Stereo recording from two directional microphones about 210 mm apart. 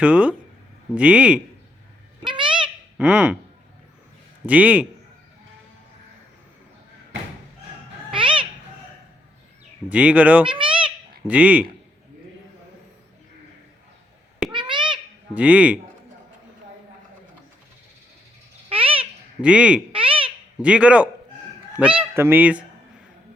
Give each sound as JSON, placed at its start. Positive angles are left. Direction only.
{"t": 0.0, "sound": "a man's voice", "side_deg": -5}
{"t": 2.2, "sound": "a sound", "side_deg": -25}
{"t": 3.0, "sound": "a man's voice", "side_deg": -5}
{"t": 4.4, "sound": "speech", "side_deg": -5}
{"t": 8.1, "sound": "a sound", "side_deg": -25}
{"t": 9.9, "sound": "speech", "side_deg": -5}
{"t": 10.4, "sound": "a sound", "side_deg": -25}
{"t": 11.3, "sound": "speech", "side_deg": -5}
{"t": 14.5, "sound": "a sound", "side_deg": -20}
{"t": 15.4, "sound": "speech", "side_deg": -5}
{"t": 18.7, "sound": "bird", "side_deg": -25}
{"t": 19.4, "sound": "a man's voice", "side_deg": -5}
{"t": 19.9, "sound": "babbling", "side_deg": -25}
{"t": 20.6, "sound": "a man's voice", "side_deg": -5}